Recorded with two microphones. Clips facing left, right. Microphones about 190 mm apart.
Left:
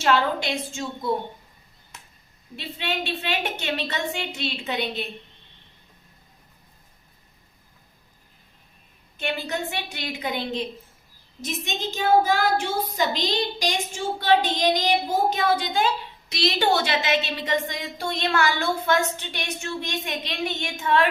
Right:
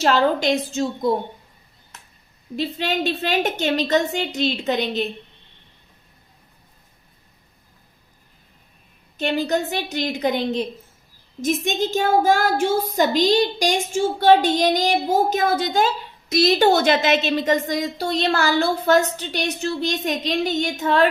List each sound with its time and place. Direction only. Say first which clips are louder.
0.0 s a woman's voice: right 4 dB; 40° right (ahead or behind)
2.6 s a woman's voice: right 7 dB; 40° right (ahead or behind)
9.1 s a woman's voice: right 7 dB; 40° right (ahead or behind)